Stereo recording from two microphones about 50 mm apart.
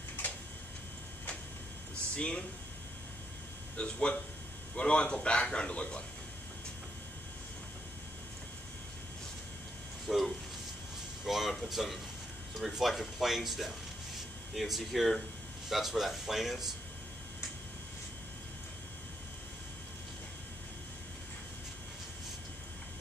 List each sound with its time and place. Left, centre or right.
2.1 s speech: left
3.7 s a man's voice: left
10.0 s a sound: centre
11.2 s speech: centre